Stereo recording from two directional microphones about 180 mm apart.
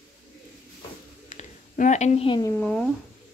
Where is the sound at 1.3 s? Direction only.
40° left (ahead or behind).